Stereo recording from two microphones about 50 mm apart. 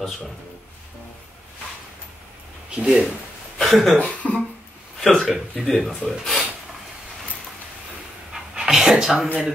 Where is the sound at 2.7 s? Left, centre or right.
Centre.